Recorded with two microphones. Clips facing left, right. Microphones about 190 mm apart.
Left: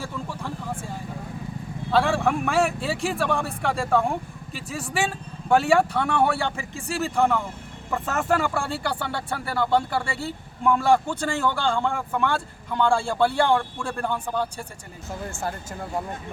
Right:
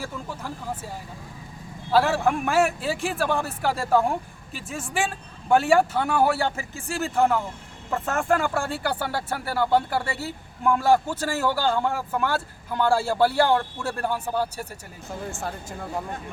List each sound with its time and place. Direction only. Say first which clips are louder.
0.0 s speech: left 1 dB; 5° right (ahead or behind)
1.9 s speech: right 1 dB; 5° right (ahead or behind)